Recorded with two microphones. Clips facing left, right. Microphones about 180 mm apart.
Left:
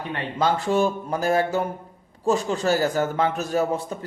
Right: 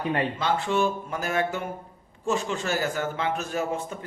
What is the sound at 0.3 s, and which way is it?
A man's voice, 40° left (ahead or behind).